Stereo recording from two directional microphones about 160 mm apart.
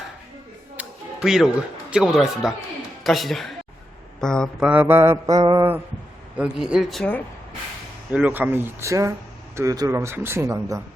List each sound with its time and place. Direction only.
0.8 s a sound: 5° right (ahead or behind)
1.9 s speech: 5° right (ahead or behind)
4.6 s speech: 10° right (ahead or behind)
6.3 s speech: 5° right (ahead or behind)
8.1 s speech: 10° right (ahead or behind)